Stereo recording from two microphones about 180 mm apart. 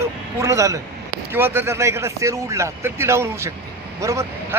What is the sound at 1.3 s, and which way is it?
Speech, 15° right (ahead or behind).